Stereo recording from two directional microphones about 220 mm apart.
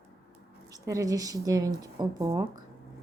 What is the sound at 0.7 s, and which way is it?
Speech, 15° right (ahead or behind).